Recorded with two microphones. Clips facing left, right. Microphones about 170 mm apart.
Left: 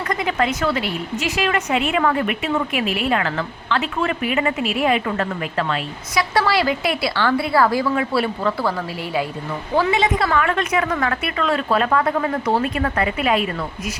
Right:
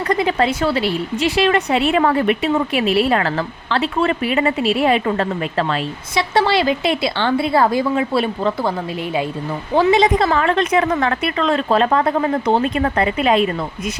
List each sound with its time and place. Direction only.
0.1 s a woman's voice: 30° right (ahead or behind)
9.9 s a woman's voice: 35° right (ahead or behind)